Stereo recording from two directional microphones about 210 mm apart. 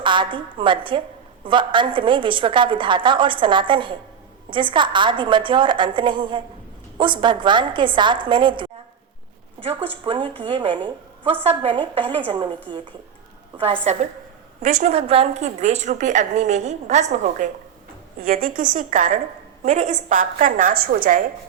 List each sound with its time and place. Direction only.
0.0 s a woman's voice: 25° right (ahead or behind)
10.0 s a woman's voice: 25° right (ahead or behind)
13.9 s a woman's voice: 30° right (ahead or behind)